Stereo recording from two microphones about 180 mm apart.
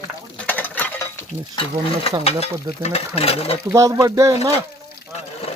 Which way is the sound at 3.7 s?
15° right (ahead or behind).